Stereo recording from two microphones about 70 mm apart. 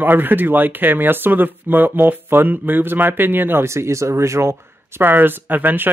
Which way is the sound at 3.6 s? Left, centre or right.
Right.